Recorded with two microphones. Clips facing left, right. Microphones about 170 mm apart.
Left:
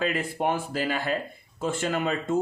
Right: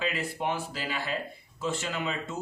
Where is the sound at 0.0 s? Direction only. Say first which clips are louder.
Left 5 dB; 50° left (ahead or behind).